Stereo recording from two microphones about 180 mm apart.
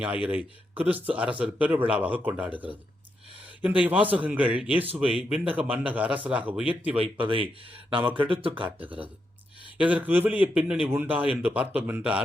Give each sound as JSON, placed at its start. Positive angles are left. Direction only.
{"t": 0.0, "sound": "a man's voice", "side_deg": -10}
{"t": 3.8, "sound": "a man's voice", "side_deg": -10}
{"t": 6.9, "sound": "speech", "side_deg": -30}
{"t": 9.7, "sound": "a man's voice", "side_deg": -5}